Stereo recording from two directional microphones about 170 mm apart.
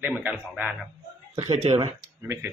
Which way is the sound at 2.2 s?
15° right (ahead or behind).